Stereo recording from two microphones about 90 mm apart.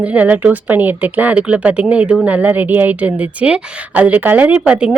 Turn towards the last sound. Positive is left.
turn(degrees=-15)  # may be behind; listen again after turning